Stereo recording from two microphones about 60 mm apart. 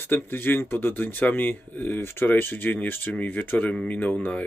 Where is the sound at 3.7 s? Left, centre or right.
Centre.